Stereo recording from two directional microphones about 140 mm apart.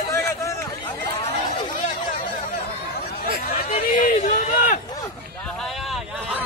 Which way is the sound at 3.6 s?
65° left (ahead or behind).